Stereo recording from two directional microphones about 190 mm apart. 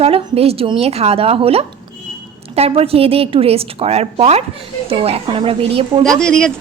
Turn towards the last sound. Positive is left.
turn(degrees=5)  # may be behind; listen again after turning